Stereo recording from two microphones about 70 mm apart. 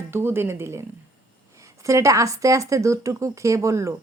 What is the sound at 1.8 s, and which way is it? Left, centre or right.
A woman's voice, right.